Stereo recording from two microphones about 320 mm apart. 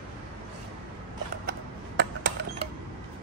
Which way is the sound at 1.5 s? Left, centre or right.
Right.